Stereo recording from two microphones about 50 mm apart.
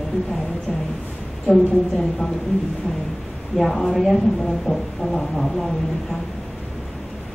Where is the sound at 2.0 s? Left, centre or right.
Centre.